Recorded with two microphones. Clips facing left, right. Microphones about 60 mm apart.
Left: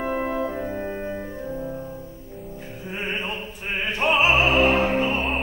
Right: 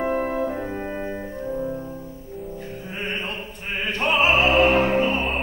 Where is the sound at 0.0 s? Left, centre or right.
Centre.